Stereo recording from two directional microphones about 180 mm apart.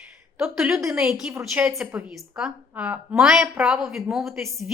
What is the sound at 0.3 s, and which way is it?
A woman's voice, 10° right (ahead or behind).